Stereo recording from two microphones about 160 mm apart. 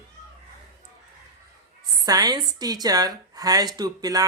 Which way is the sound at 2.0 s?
25° right (ahead or behind).